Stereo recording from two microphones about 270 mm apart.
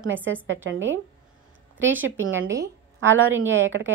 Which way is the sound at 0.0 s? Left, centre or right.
Right.